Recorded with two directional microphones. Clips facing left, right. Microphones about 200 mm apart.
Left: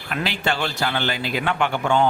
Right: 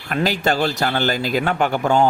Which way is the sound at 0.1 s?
40° right (ahead or behind).